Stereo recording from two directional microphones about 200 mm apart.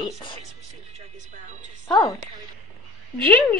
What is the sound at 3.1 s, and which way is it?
Speech, 5° left (ahead or behind).